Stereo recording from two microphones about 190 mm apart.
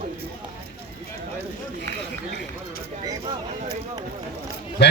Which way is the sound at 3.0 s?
20° right (ahead or behind).